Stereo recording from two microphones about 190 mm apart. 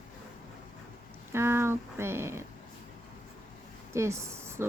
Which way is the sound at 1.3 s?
15° right (ahead or behind).